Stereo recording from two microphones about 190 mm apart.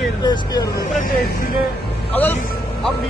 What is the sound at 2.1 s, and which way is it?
Speech, 10° left (ahead or behind).